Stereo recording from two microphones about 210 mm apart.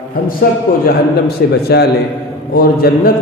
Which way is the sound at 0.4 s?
40° left (ahead or behind).